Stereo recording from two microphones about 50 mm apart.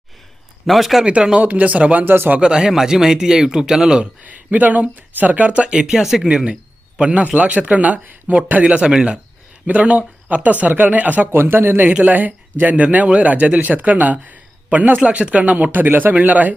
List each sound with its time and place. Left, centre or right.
0.7 s speech: centre
1.0 s speech: centre
1.4 s speech: right
2.0 s speech: right
2.4 s speech: centre
4.5 s speech: right
6.0 s speech: centre
6.2 s speech: right
11.3 s speech: right
11.9 s speech: right